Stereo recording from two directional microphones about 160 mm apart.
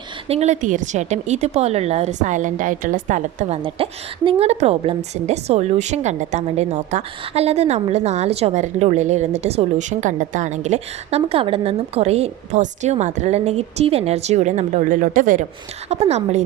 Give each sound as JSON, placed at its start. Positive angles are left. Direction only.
{"t": 0.3, "sound": "a woman's voice", "side_deg": -45}
{"t": 3.6, "sound": "a woman's voice", "side_deg": -30}
{"t": 15.9, "sound": "a woman's voice", "side_deg": -40}